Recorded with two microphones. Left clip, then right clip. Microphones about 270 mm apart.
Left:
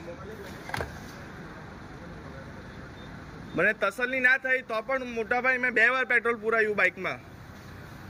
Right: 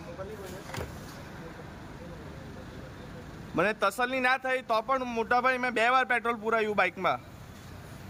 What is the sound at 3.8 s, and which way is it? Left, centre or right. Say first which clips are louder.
Speech: left 1 dB; centre.